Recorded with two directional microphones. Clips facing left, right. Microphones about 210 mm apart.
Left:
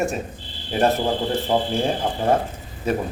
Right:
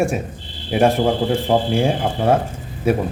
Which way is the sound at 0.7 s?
10° right (ahead or behind).